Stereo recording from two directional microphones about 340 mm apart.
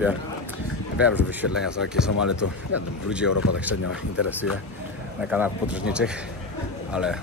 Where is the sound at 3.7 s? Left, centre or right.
Left.